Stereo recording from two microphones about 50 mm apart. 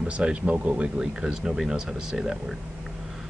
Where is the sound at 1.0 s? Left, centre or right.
Centre.